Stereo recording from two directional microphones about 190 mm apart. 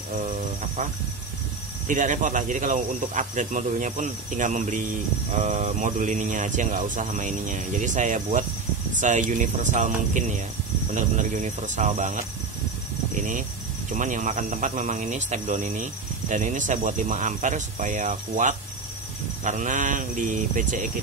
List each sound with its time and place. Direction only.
1.9 s speech: 40° right (ahead or behind)